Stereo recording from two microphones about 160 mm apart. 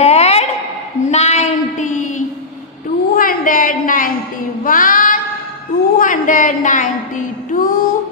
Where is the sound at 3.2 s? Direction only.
60° left (ahead or behind).